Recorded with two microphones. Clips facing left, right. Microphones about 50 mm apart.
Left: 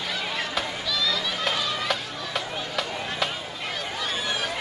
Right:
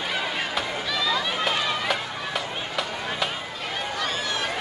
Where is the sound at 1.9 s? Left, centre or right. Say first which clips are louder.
Right 3 dB; right.